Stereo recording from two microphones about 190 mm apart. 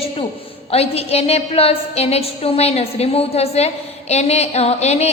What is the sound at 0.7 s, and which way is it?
A woman's voice, 30° left (ahead or behind).